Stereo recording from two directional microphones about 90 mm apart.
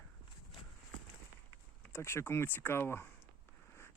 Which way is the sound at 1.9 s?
25° left (ahead or behind).